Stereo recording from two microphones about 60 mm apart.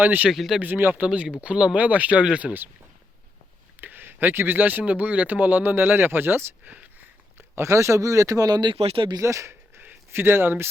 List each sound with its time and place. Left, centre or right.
0.0 s speech: right
0.3 s speech: centre
0.6 s speech: right
1.0 s speech: right
3.8 s speech: right
6.7 s a sound: right
7.5 s speech: right
9.1 s speech: right
9.7 s a sound: right